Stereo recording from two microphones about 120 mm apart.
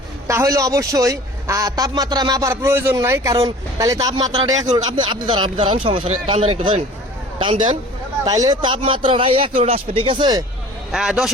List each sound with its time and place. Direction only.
0.3 s a man's voice: 25° right (ahead or behind)
2.5 s speech: 20° right (ahead or behind); by 6.7 s 50° right (ahead or behind)
8.2 s speech: 35° right (ahead or behind)
10.9 s a man's voice: 5° right (ahead or behind)